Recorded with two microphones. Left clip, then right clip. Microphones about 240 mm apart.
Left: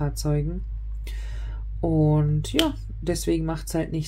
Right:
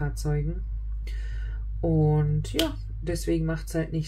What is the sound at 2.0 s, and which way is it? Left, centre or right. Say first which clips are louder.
Speech: left 3 dB; left.